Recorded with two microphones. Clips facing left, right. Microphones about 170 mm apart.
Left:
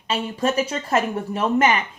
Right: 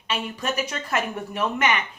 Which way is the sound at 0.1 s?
30° left (ahead or behind).